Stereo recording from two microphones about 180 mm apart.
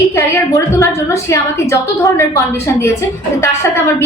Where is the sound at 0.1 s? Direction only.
15° left (ahead or behind).